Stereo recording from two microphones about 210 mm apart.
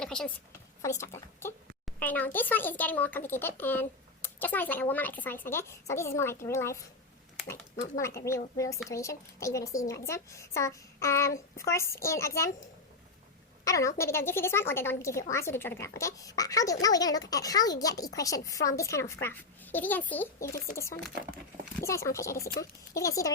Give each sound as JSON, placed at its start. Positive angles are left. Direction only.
{"t": 0.0, "sound": "a sound", "side_deg": 5}
{"t": 0.8, "sound": "speech", "side_deg": 15}
{"t": 13.7, "sound": "speech", "side_deg": 15}
{"t": 22.4, "sound": "speech", "side_deg": 45}
{"t": 23.0, "sound": "speech", "side_deg": 15}